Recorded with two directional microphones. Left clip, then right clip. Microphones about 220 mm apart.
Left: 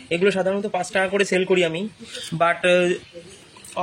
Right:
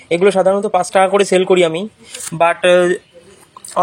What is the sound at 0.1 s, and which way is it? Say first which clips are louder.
Speech: right 8 dB; 20° right (ahead or behind).